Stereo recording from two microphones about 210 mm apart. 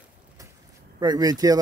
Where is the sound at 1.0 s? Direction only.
20° right (ahead or behind).